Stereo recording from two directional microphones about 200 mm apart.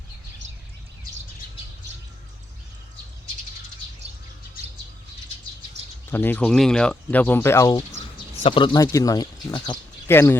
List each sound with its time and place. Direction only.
6.1 s speech: 10° left (ahead or behind)